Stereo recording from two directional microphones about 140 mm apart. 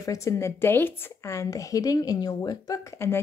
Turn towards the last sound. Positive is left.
turn(degrees=20)  # may be behind; listen again after turning